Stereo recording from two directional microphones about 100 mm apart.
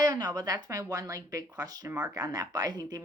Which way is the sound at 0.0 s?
40° right (ahead or behind).